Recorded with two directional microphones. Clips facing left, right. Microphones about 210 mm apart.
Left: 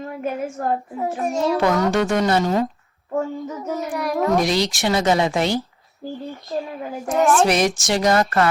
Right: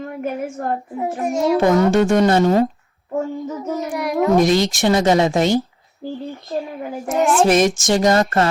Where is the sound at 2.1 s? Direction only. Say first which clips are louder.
Right 4 dB; 50° right (ahead or behind).